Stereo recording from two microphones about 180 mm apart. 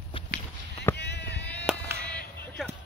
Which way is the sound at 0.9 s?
65° left (ahead or behind).